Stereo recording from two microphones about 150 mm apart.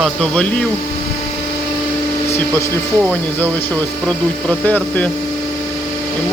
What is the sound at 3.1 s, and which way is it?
Speech, 10° left (ahead or behind).